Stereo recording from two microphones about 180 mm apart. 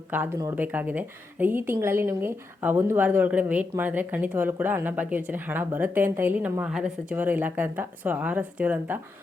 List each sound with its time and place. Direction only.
0.1 s speech: 15° right (ahead or behind)